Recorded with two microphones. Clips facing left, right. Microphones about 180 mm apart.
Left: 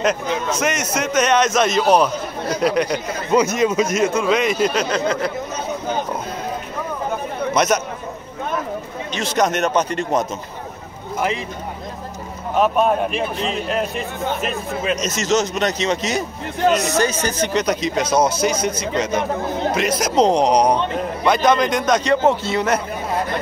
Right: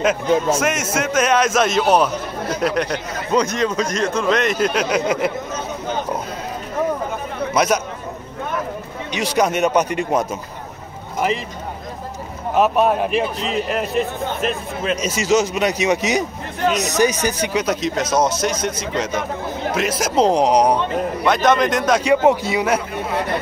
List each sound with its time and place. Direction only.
0.6 s speech: 5° right (ahead or behind)
4.8 s a man's voice: 15° right (ahead or behind)
7.5 s speech: 5° right (ahead or behind)
9.1 s a man's voice: 10° right (ahead or behind)
12.5 s speech: 5° right (ahead or behind)
15.0 s a man's voice: 10° right (ahead or behind)